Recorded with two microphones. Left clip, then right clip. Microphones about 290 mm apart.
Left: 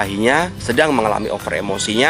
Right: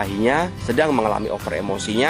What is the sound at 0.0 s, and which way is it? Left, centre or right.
Speech, centre.